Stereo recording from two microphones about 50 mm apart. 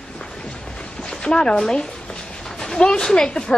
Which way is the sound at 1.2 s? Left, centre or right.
Centre.